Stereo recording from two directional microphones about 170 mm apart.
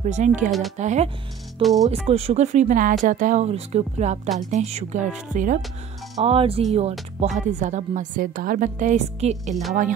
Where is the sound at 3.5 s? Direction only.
40° right (ahead or behind).